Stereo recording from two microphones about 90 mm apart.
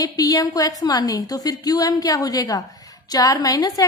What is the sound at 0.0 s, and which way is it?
A woman's voice, 45° left (ahead or behind).